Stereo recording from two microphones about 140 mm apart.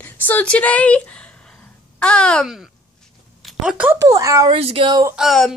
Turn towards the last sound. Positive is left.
turn(degrees=0)  # may be behind; listen again after turning